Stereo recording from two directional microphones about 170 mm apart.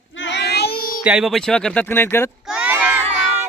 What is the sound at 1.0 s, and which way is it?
Speech, 5° right (ahead or behind).